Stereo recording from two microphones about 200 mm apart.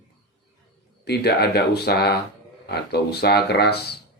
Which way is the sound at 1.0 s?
55° left (ahead or behind).